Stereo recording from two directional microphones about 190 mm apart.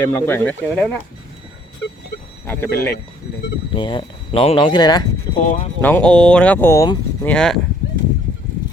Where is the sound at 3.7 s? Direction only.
25° left (ahead or behind).